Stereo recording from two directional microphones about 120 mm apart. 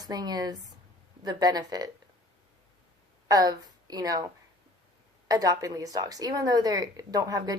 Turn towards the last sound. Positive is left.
turn(degrees=-30)  # may be behind; listen again after turning